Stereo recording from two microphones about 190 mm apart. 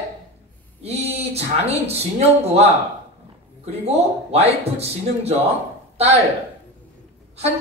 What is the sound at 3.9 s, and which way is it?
Speech, 35° right (ahead or behind).